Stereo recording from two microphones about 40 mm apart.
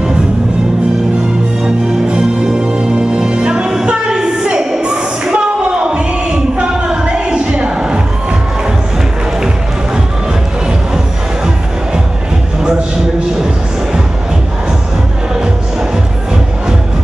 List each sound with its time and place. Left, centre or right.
2.0 s music: right
3.8 s a sound: centre
6.9 s music: right